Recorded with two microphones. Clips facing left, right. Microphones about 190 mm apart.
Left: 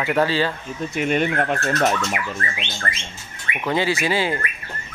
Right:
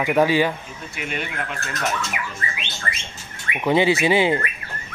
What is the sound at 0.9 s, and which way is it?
Speech, 45° left (ahead or behind).